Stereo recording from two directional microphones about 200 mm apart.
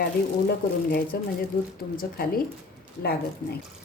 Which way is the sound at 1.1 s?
50° left (ahead or behind).